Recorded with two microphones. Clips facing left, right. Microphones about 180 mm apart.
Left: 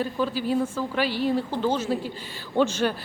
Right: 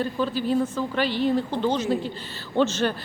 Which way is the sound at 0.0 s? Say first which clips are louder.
Right 1 dB; 10° left (ahead or behind).